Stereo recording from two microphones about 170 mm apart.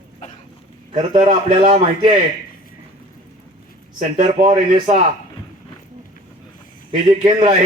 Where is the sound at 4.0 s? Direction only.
45° right (ahead or behind).